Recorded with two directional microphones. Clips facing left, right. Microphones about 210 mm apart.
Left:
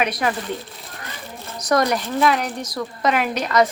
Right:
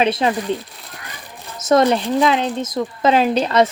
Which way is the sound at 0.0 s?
25° right (ahead or behind).